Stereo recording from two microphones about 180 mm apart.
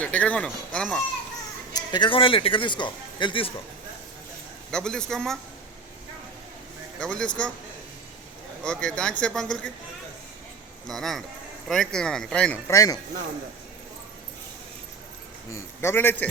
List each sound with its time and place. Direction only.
0.0 s speech: 5° left (ahead or behind)
1.7 s a man's voice: 25° left (ahead or behind)
4.7 s speech: 5° left (ahead or behind)
7.0 s speech: 5° left (ahead or behind)
8.6 s speech: 5° left (ahead or behind)
10.8 s speech: centre (ahead or behind)
12.6 s a man's voice: 20° left (ahead or behind)
15.5 s a man's voice: 15° left (ahead or behind)